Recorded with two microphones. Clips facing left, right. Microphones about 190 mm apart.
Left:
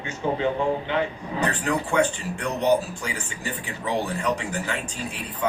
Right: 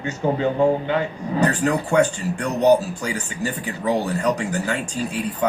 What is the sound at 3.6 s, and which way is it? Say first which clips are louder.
Speech: right 4 dB; 40° right (ahead or behind).